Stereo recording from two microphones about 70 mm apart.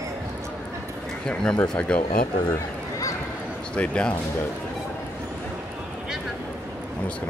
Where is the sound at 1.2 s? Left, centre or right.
Centre.